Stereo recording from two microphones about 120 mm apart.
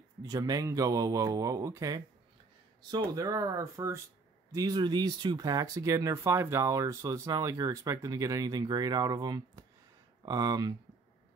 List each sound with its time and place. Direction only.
0.2 s speech: 35° right (ahead or behind)